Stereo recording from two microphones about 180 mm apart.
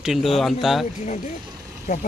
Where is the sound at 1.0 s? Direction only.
40° left (ahead or behind).